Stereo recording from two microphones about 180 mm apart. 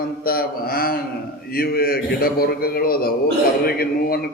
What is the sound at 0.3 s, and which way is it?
A man's voice, 55° left (ahead or behind).